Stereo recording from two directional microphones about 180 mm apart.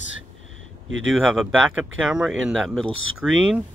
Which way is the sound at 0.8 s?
90° right.